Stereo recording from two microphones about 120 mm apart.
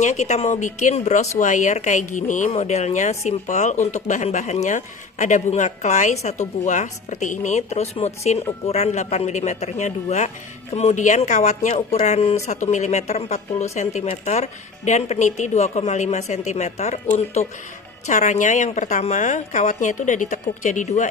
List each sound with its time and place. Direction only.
0.0 s speech: 70° left (ahead or behind)
1.4 s speech: 90° left; by 12.4 s 60° left (ahead or behind)
12.4 s speech: 80° left